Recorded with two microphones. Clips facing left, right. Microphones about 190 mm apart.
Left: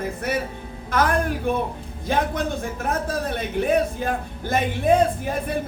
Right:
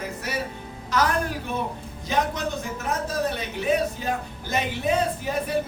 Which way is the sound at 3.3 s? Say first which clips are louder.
Left 3 dB; 55° left (ahead or behind).